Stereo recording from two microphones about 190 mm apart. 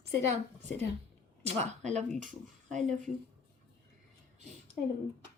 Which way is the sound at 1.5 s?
35° right (ahead or behind).